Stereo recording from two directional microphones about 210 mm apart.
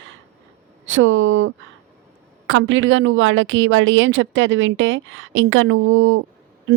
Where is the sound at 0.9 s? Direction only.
65° right (ahead or behind).